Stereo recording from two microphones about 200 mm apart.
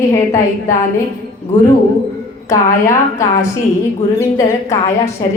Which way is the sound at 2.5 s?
15° left (ahead or behind).